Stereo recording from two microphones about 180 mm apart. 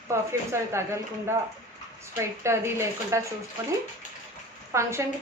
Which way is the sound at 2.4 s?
15° right (ahead or behind).